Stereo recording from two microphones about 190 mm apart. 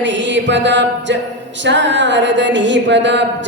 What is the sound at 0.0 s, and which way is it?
Music, 70° right (ahead or behind).